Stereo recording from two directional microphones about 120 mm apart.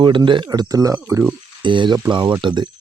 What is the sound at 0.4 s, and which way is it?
Speech, 35° right (ahead or behind).